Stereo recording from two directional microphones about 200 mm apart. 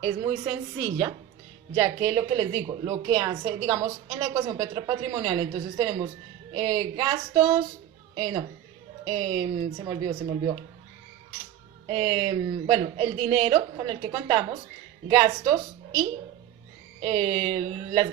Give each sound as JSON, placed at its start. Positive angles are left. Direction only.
{"t": 0.1, "sound": "a woman's voice", "side_deg": -25}
{"t": 11.9, "sound": "a woman's voice", "side_deg": -25}